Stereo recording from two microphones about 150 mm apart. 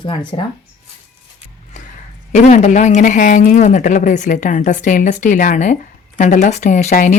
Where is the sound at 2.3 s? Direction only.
55° left (ahead or behind).